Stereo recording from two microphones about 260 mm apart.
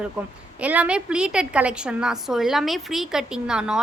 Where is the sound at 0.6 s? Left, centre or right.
Centre.